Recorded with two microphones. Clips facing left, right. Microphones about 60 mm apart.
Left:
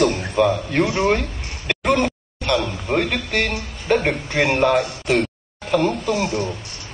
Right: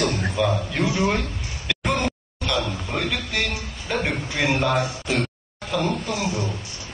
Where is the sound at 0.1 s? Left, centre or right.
Left.